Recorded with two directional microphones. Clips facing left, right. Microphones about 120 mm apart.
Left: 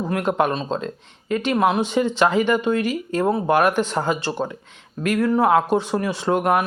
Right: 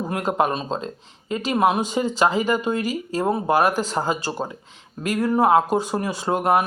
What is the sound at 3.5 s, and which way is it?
Speech, 35° right (ahead or behind).